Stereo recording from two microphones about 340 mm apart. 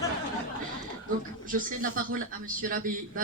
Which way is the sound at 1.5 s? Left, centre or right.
Right.